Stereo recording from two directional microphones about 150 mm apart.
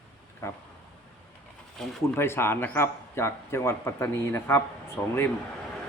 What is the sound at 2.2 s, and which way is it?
A man's voice, 15° left (ahead or behind).